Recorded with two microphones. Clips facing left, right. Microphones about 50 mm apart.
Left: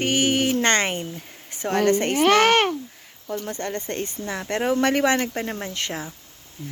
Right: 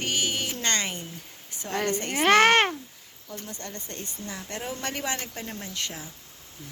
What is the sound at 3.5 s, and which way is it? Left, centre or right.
Speech, left.